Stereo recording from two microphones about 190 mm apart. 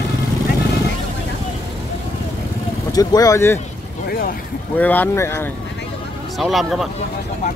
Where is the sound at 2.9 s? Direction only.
20° left (ahead or behind).